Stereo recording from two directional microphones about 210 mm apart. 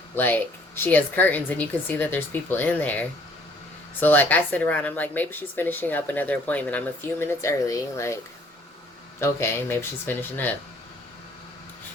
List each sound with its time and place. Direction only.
0.8 s speech: 10° left (ahead or behind)
4.0 s speech: 10° left (ahead or behind)
9.2 s speech: 10° left (ahead or behind)